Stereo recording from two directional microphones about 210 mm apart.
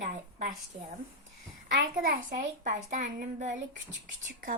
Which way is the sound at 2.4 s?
35° right (ahead or behind).